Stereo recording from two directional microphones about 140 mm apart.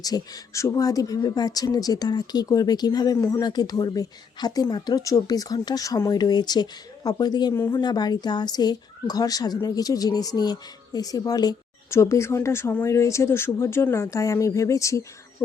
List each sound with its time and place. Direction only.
0.0 s speech: 25° left (ahead or behind)
7.5 s speech: 20° left (ahead or behind)
7.8 s speech: 30° left (ahead or behind)